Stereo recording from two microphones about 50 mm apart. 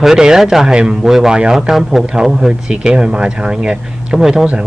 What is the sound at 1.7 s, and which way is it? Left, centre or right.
Speech, centre.